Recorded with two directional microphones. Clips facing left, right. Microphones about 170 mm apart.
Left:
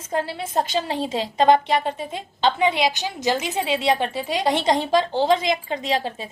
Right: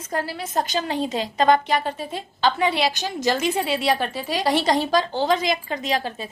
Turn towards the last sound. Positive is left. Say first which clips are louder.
# left 1 dB
turn(degrees=25)  # may be behind; listen again after turning